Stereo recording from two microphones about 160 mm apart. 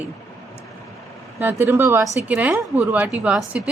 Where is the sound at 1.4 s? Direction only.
15° right (ahead or behind).